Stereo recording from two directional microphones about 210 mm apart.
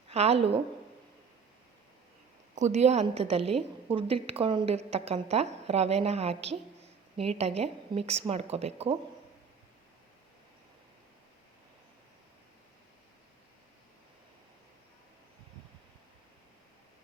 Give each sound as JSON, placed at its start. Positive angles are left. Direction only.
{"t": 0.1, "sound": "a woman's voice", "side_deg": -30}
{"t": 2.6, "sound": "a woman's voice", "side_deg": -35}